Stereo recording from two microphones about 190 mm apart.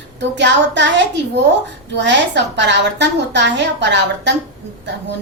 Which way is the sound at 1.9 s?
70° right (ahead or behind).